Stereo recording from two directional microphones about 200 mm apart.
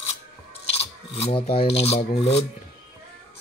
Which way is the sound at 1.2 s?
25° left (ahead or behind).